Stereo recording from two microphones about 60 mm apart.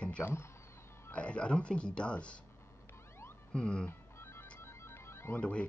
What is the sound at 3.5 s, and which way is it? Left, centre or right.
Speech, centre.